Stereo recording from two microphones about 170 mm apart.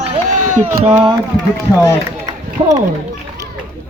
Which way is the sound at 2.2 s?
20° right (ahead or behind).